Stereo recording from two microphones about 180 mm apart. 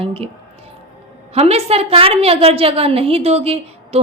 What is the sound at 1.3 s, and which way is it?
A woman's voice, 35° right (ahead or behind).